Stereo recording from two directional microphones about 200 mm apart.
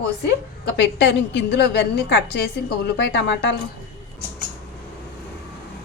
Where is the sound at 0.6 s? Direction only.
60° left (ahead or behind).